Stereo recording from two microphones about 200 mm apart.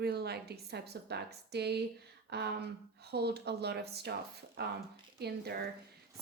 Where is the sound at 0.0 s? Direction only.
55° right (ahead or behind).